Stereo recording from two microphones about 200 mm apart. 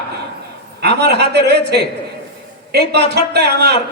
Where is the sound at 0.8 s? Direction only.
55° right (ahead or behind).